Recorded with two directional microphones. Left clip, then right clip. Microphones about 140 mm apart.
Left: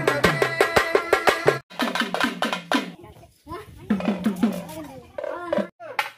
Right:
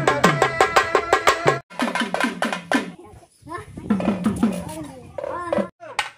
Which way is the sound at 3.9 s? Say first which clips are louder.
Right 2 dB; 50° right (ahead or behind).